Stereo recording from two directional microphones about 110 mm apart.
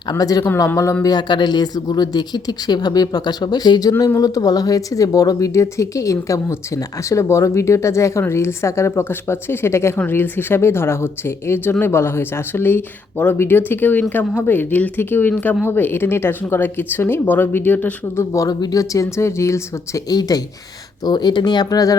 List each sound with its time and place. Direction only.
0.1 s speech: 35° left (ahead or behind)
0.4 s speech: 20° left (ahead or behind)
1.0 s speech: 40° left (ahead or behind); by 18.3 s 15° left (ahead or behind)
18.3 s speech: 35° left (ahead or behind)